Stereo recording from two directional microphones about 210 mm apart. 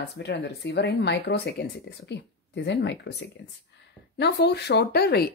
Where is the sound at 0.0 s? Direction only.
55° left (ahead or behind).